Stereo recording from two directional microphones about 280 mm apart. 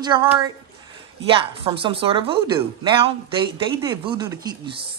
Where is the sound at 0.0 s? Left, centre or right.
Centre.